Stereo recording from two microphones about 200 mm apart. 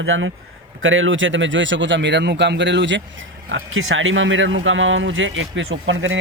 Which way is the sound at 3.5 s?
75° right (ahead or behind).